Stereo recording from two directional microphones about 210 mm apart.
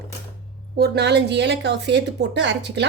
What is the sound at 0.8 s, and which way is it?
A woman's voice, 55° right (ahead or behind).